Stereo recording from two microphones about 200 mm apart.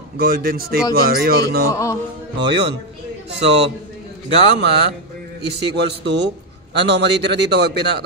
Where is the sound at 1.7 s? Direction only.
15° left (ahead or behind).